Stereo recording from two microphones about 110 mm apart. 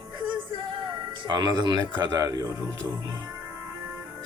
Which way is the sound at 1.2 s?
40° right (ahead or behind).